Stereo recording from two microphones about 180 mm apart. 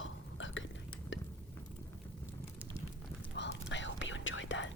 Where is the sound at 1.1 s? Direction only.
90° left.